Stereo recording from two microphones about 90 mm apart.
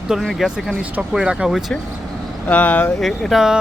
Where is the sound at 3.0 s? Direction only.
Centre (ahead or behind).